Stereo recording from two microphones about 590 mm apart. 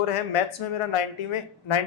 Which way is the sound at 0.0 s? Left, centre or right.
Left.